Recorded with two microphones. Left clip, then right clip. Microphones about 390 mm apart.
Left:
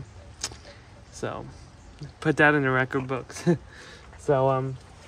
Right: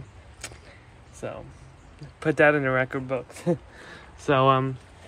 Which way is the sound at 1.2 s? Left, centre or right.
Centre.